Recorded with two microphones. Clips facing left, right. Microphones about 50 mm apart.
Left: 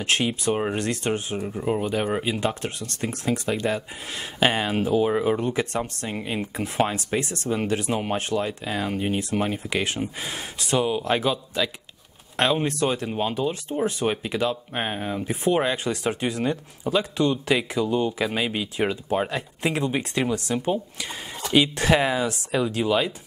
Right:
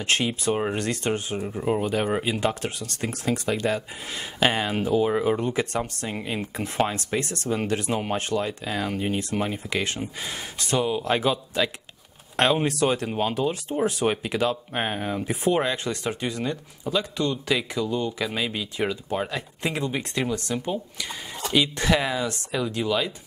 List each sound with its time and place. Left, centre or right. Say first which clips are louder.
0.0 s speech: left 1 dB; centre
11.1 s speech: right 1 dB; centre